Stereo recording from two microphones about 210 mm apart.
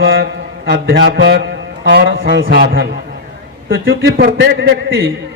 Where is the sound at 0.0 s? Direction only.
45° right (ahead or behind).